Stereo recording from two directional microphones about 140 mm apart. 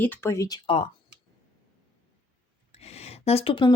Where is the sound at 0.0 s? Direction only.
15° left (ahead or behind).